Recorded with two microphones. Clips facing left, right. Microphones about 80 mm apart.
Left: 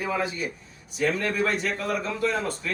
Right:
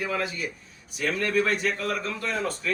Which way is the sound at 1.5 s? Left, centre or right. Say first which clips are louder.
Even; centre.